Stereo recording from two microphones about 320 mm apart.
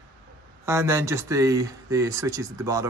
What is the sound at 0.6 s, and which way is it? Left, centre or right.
Speech, centre.